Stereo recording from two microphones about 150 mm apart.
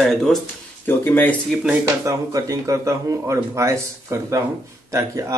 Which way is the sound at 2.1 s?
20° right (ahead or behind).